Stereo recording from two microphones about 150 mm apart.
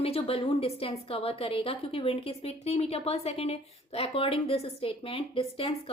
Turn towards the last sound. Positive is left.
turn(degrees=40)  # may be behind; listen again after turning